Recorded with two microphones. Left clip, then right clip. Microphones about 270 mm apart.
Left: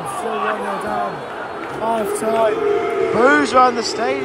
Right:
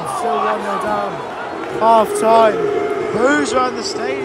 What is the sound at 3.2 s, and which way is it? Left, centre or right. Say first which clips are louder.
A man's voice: left 3 dB; centre.